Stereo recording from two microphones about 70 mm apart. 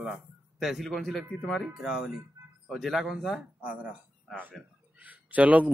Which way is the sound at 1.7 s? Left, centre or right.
Centre.